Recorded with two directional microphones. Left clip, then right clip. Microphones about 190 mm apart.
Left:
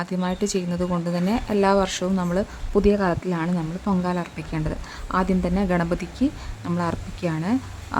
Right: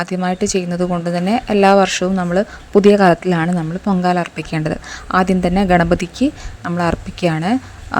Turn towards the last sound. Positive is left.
turn(degrees=-25)  # may be behind; listen again after turning